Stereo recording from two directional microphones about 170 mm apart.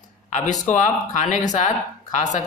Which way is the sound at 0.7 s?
45° left (ahead or behind).